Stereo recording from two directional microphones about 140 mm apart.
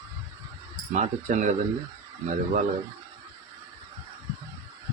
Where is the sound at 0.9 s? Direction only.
60° right (ahead or behind).